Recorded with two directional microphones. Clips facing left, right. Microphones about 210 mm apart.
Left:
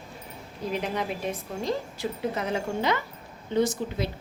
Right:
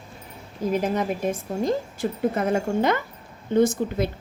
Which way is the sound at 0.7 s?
45° right (ahead or behind).